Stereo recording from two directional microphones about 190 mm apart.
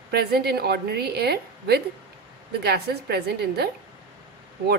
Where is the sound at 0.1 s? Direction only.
55° right (ahead or behind).